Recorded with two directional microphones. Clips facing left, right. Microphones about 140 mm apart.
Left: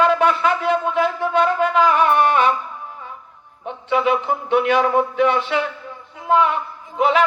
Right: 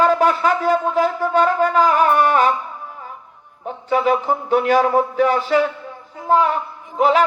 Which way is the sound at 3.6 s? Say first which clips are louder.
Right 1 dB; 40° right (ahead or behind).